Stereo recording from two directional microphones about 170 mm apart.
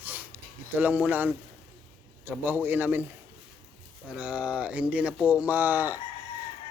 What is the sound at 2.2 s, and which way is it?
Speech, 10° right (ahead or behind).